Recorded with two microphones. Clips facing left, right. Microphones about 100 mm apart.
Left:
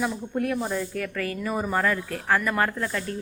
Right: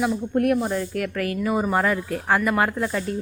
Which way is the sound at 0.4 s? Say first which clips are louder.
Right 4 dB; 15° right (ahead or behind).